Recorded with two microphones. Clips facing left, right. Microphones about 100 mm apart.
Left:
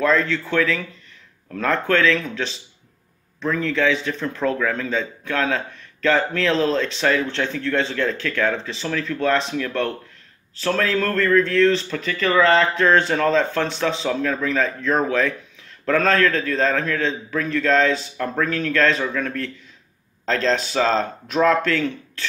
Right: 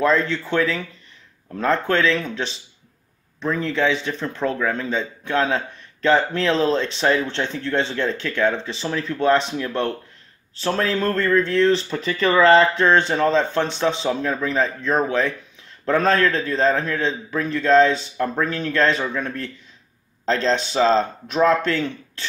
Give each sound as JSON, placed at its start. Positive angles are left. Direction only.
{"t": 0.1, "sound": "speech", "side_deg": -25}
{"t": 3.4, "sound": "speech", "side_deg": -20}